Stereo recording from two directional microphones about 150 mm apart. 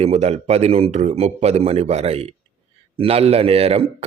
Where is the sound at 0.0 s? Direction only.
45° right (ahead or behind).